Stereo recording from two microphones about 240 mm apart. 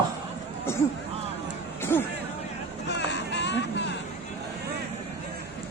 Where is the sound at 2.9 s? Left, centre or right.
Left.